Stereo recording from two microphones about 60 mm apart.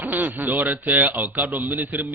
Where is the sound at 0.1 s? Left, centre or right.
Right.